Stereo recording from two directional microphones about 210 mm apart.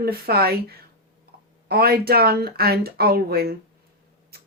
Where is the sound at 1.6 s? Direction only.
45° right (ahead or behind).